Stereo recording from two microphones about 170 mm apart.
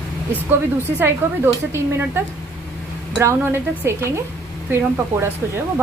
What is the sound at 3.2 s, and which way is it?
Speech, 15° right (ahead or behind).